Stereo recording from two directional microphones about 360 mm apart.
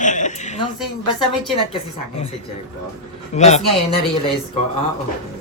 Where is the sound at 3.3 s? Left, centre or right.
Centre.